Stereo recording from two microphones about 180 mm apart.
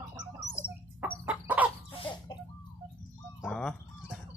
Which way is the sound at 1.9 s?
25° left (ahead or behind).